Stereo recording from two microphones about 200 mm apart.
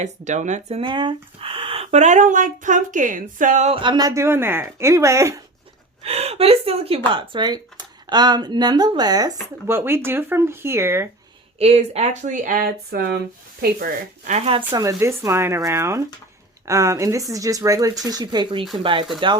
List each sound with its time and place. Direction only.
0.0 s speech: 35° right (ahead or behind); by 5.4 s 15° right (ahead or behind)
6.0 s a woman's voice: 30° right (ahead or behind); by 11.1 s 10° right (ahead or behind)
11.6 s speech: 30° right (ahead or behind)
14.7 s speech: 15° right (ahead or behind)